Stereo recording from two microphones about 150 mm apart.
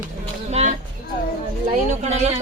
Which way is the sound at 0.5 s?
45° right (ahead or behind).